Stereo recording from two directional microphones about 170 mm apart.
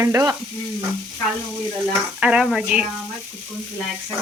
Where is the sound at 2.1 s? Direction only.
5° right (ahead or behind).